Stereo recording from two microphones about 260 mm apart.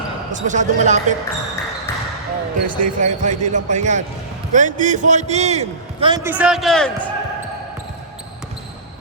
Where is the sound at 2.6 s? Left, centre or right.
Right; by 7.1 s centre.